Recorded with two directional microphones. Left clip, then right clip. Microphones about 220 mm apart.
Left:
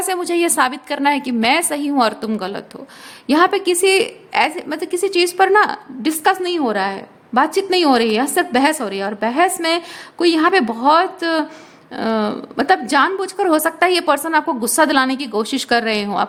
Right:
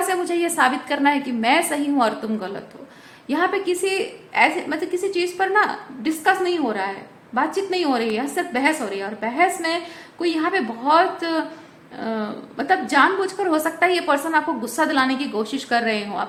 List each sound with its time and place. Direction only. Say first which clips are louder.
0.1 s a woman's voice: left 4 dB; 50° left (ahead or behind)